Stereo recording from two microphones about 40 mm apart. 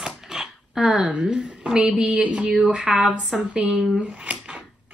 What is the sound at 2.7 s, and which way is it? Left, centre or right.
Speech, centre.